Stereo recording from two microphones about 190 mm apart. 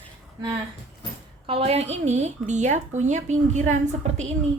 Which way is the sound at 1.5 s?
30° right (ahead or behind).